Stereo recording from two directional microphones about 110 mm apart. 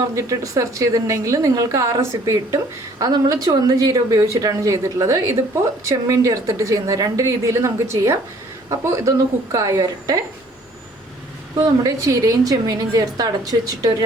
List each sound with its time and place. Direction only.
0.2 s a woman's voice: 30° right (ahead or behind)
11.5 s speech: 35° right (ahead or behind)